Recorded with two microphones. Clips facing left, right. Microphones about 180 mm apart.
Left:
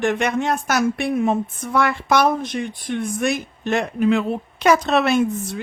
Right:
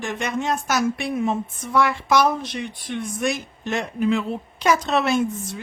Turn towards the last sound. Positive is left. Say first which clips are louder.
# left 3 dB
turn(degrees=65)  # may be behind; listen again after turning